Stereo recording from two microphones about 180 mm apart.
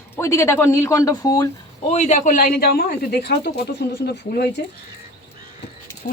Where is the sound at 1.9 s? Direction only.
40° left (ahead or behind); by 4.5 s 60° left (ahead or behind).